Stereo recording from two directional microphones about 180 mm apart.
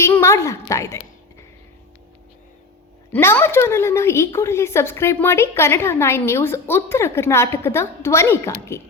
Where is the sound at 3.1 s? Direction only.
10° left (ahead or behind).